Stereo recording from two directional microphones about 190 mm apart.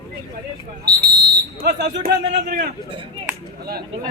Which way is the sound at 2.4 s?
45° right (ahead or behind).